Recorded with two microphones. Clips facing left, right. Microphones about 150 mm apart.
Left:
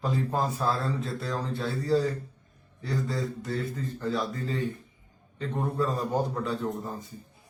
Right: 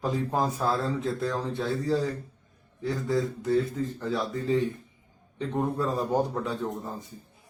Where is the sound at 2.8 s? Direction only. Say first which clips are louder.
Right 4 dB; 20° right (ahead or behind).